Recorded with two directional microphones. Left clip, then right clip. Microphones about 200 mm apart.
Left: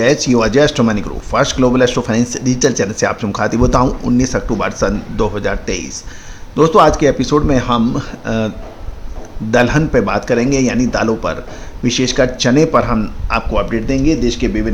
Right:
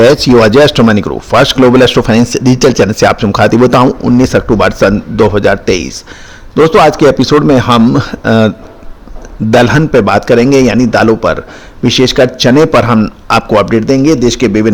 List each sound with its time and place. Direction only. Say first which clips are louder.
0.0 s a man's voice: right 8 dB; 45° right (ahead or behind)